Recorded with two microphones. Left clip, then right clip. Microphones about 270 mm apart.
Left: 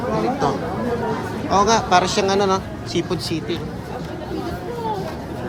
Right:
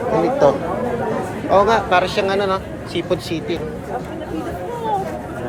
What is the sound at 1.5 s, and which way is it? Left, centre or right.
Speech, centre.